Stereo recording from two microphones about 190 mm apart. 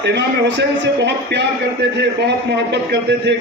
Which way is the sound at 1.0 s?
65° right (ahead or behind).